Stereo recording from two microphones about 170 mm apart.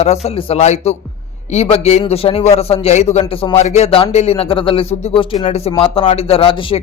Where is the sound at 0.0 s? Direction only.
40° left (ahead or behind).